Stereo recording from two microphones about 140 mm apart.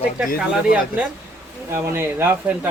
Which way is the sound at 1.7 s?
15° right (ahead or behind).